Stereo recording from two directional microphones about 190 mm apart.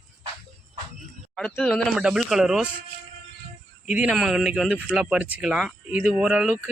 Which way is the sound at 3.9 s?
5° right (ahead or behind).